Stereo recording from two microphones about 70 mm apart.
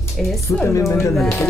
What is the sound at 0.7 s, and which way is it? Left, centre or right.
Speech, left.